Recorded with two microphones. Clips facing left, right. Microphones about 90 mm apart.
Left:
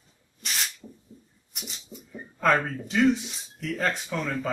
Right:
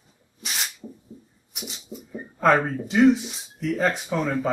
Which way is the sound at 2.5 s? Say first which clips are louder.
Right 4 dB; 15° right (ahead or behind).